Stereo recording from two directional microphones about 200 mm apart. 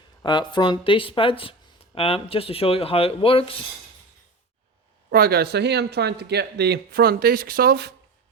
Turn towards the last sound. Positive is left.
turn(degrees=-50)  # may be behind; listen again after turning